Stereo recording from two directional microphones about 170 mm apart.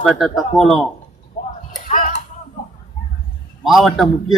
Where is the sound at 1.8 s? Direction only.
45° left (ahead or behind).